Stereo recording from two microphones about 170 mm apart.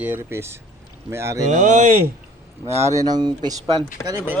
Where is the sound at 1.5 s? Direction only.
45° right (ahead or behind).